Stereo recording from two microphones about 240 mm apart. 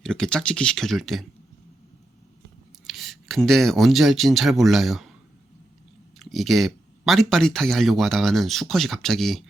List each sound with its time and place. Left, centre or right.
0.0 s speech: centre
2.8 s speech: centre
6.1 s speech: centre